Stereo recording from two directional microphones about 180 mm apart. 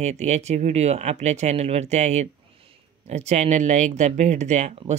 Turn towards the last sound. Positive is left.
turn(degrees=-40)  # may be behind; listen again after turning